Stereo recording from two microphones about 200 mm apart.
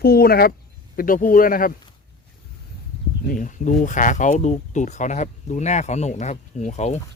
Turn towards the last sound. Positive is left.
turn(degrees=35)  # may be behind; listen again after turning